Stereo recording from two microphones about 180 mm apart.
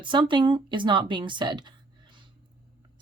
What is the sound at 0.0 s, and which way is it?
Speech, 25° right (ahead or behind).